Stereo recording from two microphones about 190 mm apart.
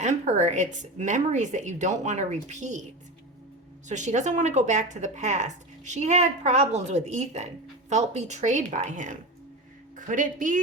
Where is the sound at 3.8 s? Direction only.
40° right (ahead or behind).